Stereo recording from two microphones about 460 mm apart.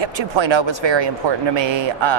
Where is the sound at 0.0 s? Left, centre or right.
Right.